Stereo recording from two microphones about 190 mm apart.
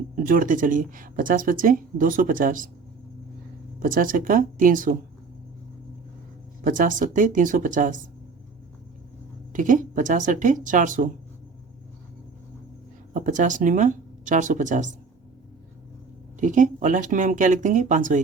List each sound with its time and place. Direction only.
0.3 s speech: 45° right (ahead or behind)
3.8 s speech: 45° right (ahead or behind)
6.7 s speech: 45° right (ahead or behind)
9.5 s speech: 45° right (ahead or behind)
13.1 s speech: 40° right (ahead or behind)
16.4 s speech: 40° right (ahead or behind)